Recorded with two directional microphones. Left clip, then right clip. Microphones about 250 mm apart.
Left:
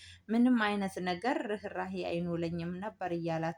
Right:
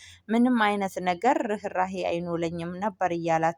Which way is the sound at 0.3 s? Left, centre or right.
Right.